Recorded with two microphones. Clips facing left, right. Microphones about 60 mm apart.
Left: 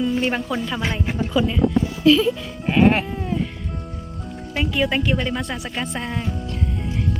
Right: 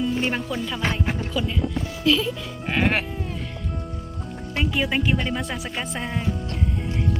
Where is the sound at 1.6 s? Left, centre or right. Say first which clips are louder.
Left 8 dB; left.